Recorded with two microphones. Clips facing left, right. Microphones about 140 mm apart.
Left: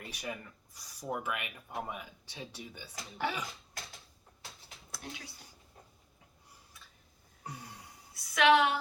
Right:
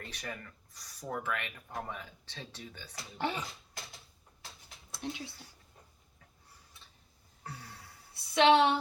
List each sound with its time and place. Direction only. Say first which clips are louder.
0.0 s speech: left 2 dB; 10° left (ahead or behind)
4.9 s speech: right 6 dB; 25° right (ahead or behind)
7.4 s a sound: left 1 dB; 15° left (ahead or behind)
8.1 s a woman's voice: right 1 dB; 25° right (ahead or behind)